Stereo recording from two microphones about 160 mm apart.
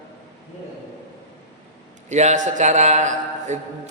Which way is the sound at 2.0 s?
45° right (ahead or behind).